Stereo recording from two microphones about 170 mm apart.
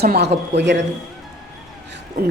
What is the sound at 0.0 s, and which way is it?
Speech, 65° right (ahead or behind).